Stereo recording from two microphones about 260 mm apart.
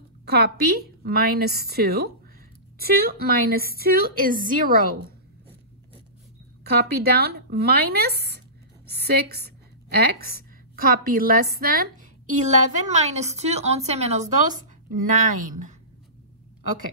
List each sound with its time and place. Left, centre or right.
0.2 s a woman's voice: right
6.6 s a woman's voice: right